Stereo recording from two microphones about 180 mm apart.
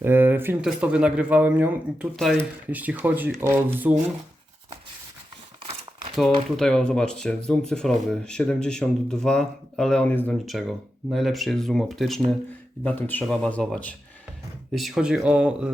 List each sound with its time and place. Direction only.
0.0 s speech: 10° right (ahead or behind)
6.6 s speech: centre (ahead or behind)